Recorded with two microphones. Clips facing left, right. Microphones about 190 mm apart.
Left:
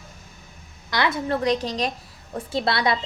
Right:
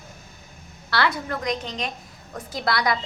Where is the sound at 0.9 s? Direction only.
20° left (ahead or behind).